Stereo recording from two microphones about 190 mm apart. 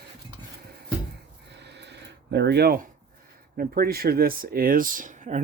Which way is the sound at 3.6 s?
50° right (ahead or behind).